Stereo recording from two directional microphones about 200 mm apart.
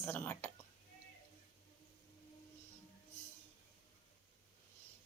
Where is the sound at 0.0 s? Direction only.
10° left (ahead or behind).